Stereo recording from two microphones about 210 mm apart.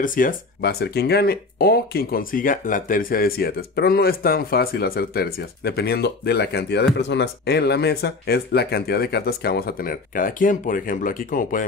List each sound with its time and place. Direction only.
0.0 s speech: 40° left (ahead or behind)